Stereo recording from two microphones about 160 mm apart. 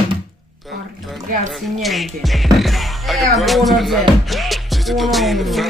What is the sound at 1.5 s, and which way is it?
Speech, centre (ahead or behind).